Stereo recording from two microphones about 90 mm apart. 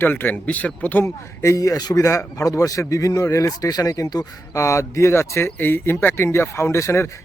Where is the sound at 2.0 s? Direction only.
35° left (ahead or behind).